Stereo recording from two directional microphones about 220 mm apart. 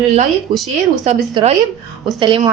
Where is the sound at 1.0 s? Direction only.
30° right (ahead or behind).